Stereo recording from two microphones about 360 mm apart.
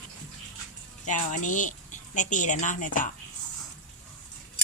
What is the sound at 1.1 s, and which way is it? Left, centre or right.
Speech, left.